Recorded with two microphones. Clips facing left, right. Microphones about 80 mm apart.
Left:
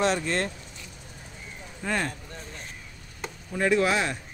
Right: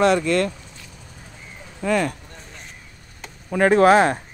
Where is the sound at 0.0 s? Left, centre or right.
Right.